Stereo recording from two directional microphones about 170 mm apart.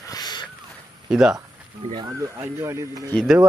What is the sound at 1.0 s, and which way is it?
Speech, 5° right (ahead or behind).